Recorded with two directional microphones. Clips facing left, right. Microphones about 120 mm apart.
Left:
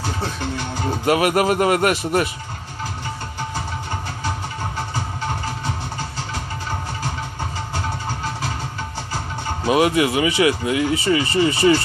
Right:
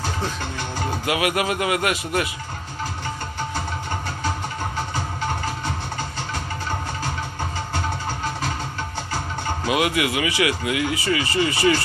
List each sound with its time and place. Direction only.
1.0 s speech: 40° left (ahead or behind)
9.7 s speech: 35° left (ahead or behind)